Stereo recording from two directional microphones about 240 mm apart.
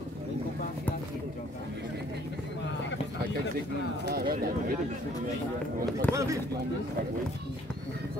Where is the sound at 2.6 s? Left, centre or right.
Left.